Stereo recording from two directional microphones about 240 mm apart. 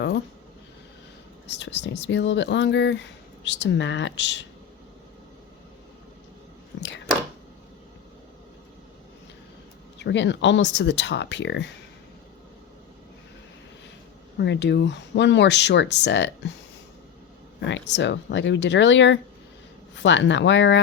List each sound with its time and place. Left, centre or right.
1.5 s speech: left
6.7 s a sound: left
10.0 s speech: left
14.3 s speech: left
17.6 s speech: left